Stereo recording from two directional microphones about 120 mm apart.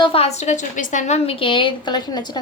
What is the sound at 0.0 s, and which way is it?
A woman's voice, 55° left (ahead or behind).